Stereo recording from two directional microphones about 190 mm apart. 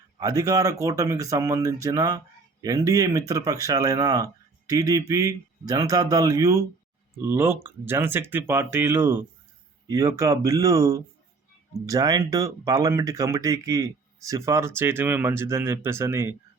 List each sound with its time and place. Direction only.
0.2 s speech: 20° right (ahead or behind)